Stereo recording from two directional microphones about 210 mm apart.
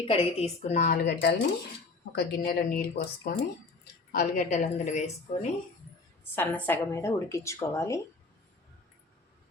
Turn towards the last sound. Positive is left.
turn(degrees=15)  # may be behind; listen again after turning